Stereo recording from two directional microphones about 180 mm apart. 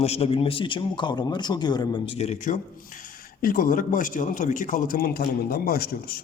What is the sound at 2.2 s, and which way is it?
A man's voice, 40° left (ahead or behind).